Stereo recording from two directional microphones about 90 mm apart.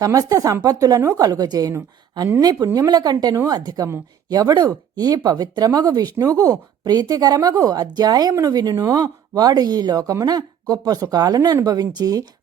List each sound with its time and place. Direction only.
0.0 s a woman's voice: 40° right (ahead or behind)